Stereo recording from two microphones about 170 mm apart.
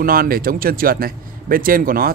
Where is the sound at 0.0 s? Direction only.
60° right (ahead or behind).